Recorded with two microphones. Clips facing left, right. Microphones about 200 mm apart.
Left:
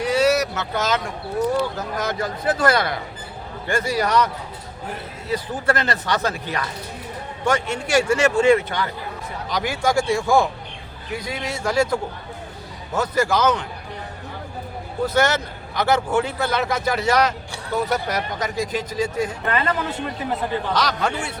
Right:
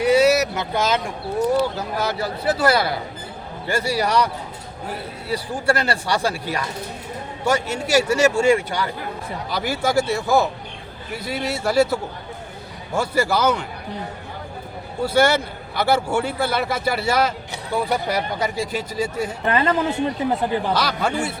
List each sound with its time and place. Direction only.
0.0 s vehicle: 10° right (ahead or behind)
2.0 s speech: 10° right (ahead or behind)
5.3 s speech: 10° right (ahead or behind)
15.0 s speech: 10° right (ahead or behind)
19.5 s speech: 25° right (ahead or behind)
20.7 s speech: 5° right (ahead or behind)